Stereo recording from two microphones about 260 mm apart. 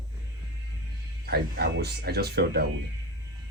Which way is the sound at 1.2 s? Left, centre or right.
Right.